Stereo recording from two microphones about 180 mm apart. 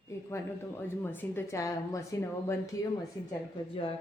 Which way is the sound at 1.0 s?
10° left (ahead or behind).